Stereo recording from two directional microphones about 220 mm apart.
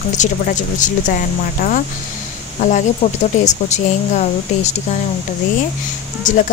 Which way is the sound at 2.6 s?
35° left (ahead or behind).